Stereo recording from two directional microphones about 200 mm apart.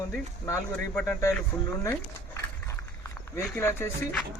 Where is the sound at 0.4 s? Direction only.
10° left (ahead or behind).